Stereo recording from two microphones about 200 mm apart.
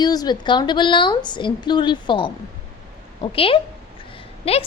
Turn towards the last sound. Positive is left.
turn(degrees=30)  # may be behind; listen again after turning